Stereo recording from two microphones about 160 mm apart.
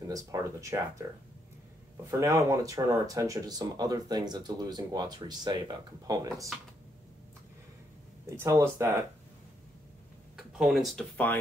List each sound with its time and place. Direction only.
0.0 s speech: 20° right (ahead or behind)
2.0 s speech: 20° right (ahead or behind)
8.4 s speech: 20° right (ahead or behind)
10.3 s speech: centre (ahead or behind)